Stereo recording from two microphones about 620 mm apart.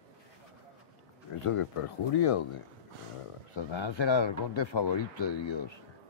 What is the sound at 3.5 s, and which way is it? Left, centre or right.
Speech, left.